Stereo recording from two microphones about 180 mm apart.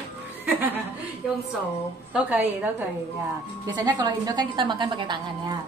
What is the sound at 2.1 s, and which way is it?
Speech, 10° right (ahead or behind).